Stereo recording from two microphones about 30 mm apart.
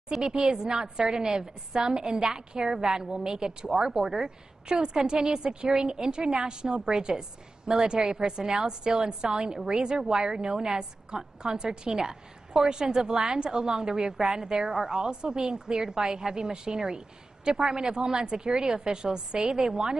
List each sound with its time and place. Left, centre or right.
0.2 s a woman's voice: right